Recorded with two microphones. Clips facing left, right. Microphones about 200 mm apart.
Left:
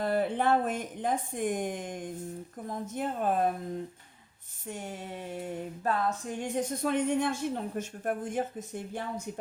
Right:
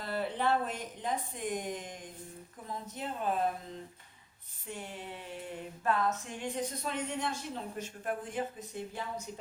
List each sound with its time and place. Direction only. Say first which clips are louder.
0.0 s speech: left 6 dB; 50° left (ahead or behind)
4.6 s speech: left 4 dB; 45° left (ahead or behind)